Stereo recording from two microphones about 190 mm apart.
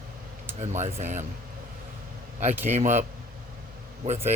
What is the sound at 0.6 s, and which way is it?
Speech, 35° right (ahead or behind).